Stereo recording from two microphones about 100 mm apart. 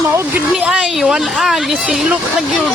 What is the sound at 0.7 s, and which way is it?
Speech, 5° right (ahead or behind).